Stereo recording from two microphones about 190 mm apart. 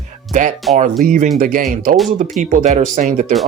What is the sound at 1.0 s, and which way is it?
Speech, 45° right (ahead or behind).